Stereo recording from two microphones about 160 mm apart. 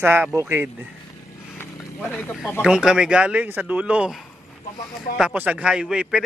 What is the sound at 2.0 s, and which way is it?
Speech, 5° left (ahead or behind).